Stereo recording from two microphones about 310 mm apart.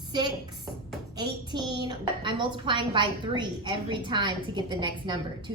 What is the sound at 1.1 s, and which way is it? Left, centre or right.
A woman's voice, centre.